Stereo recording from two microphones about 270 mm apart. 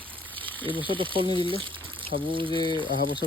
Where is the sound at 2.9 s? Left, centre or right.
Left.